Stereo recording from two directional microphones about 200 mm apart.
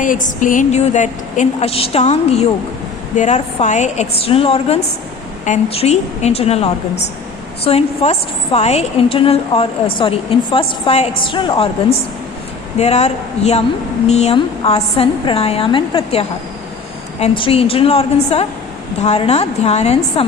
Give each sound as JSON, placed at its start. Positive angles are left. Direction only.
{"t": 0.0, "sound": "a woman's voice", "side_deg": 40}
{"t": 12.7, "sound": "a woman's voice", "side_deg": 35}